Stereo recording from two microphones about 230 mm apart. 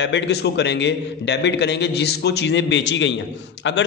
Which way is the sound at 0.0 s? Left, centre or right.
Left.